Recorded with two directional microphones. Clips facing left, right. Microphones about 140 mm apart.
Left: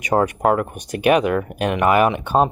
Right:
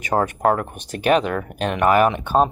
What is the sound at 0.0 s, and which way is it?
Speech, 10° left (ahead or behind).